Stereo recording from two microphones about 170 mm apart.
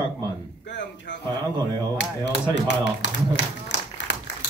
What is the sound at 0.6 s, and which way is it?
Speech, 90° left.